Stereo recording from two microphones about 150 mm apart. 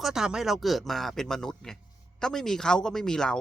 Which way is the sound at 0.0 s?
5° right (ahead or behind).